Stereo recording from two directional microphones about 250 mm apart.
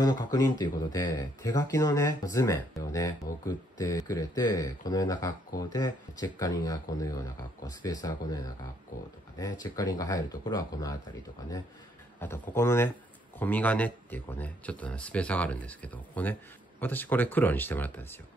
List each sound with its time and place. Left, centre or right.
0.0 s speech: centre
9.4 s speech: centre
12.2 s speech: centre